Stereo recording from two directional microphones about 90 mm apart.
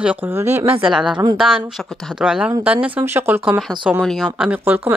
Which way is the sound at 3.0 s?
25° right (ahead or behind).